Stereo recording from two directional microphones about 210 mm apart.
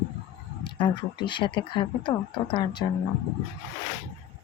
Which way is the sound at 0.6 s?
20° left (ahead or behind).